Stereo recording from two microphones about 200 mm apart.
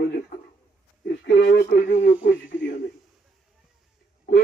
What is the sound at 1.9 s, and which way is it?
Speech, 40° left (ahead or behind).